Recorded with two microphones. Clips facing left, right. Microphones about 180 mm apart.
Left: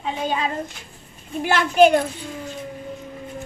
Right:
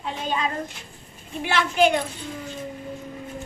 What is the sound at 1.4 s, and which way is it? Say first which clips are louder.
Speech: left 5 dB; 45° left (ahead or behind).